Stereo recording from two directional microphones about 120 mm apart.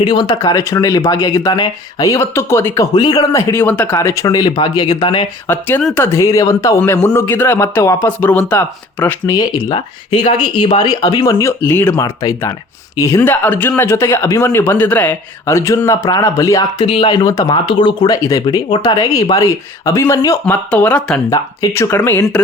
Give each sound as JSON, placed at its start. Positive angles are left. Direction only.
{"t": 0.0, "sound": "speech", "side_deg": 40}
{"t": 2.9, "sound": "speech", "side_deg": 35}
{"t": 5.5, "sound": "speech", "side_deg": 15}
{"t": 9.2, "sound": "speech", "side_deg": 30}
{"t": 10.2, "sound": "speech", "side_deg": 45}
{"t": 11.6, "sound": "speech", "side_deg": 15}
{"t": 11.9, "sound": "speech", "side_deg": 30}
{"t": 14.4, "sound": "speech", "side_deg": 20}
{"t": 16.8, "sound": "speech", "side_deg": 50}
{"t": 17.2, "sound": "speech", "side_deg": 35}
{"t": 20.4, "sound": "speech", "side_deg": 10}
{"t": 21.2, "sound": "speech", "side_deg": 30}